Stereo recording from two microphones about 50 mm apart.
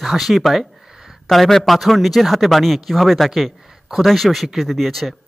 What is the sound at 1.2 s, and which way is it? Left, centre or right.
Speech, centre.